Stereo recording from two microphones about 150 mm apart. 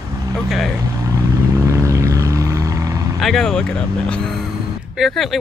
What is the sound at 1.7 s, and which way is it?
Vehicle, 20° right (ahead or behind).